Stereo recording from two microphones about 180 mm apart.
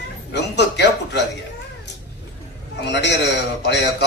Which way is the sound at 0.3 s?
70° left (ahead or behind).